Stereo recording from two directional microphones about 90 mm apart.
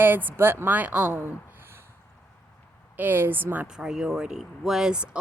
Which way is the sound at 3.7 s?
5° right (ahead or behind).